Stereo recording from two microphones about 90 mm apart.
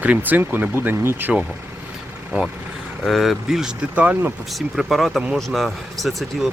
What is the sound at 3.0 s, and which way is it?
Speech, centre (ahead or behind).